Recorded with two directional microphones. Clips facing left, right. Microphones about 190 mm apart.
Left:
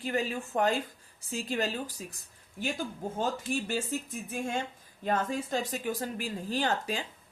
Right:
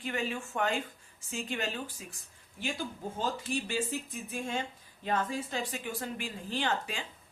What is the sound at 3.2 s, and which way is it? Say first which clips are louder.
Speech: left 2 dB; 45° left (ahead or behind).